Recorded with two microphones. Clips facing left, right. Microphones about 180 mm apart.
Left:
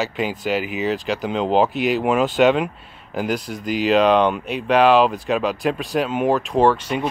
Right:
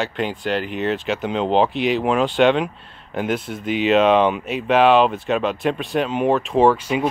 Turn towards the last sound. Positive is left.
turn(degrees=-5)  # may be behind; listen again after turning